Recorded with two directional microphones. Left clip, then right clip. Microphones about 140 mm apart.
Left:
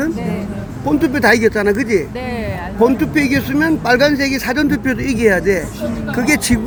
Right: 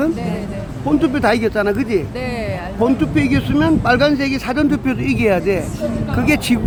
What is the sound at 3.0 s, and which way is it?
Speech, centre (ahead or behind).